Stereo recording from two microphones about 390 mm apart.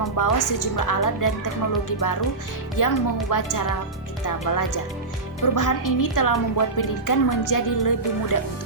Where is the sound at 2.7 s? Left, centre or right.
Left.